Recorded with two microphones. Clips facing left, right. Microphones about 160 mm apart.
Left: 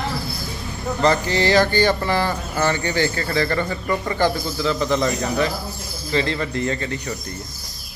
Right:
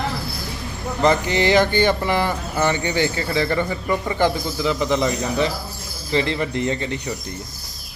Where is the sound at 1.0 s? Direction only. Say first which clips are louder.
Right 1 dB; 15° right (ahead or behind).